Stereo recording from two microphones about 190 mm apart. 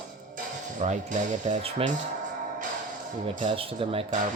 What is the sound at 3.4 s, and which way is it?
Speech, 35° right (ahead or behind).